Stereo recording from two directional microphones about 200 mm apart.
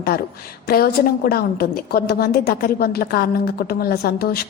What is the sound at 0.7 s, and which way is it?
A woman's voice, 50° left (ahead or behind).